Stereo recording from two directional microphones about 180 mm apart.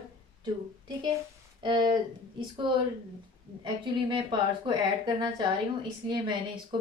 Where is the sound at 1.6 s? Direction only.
25° right (ahead or behind).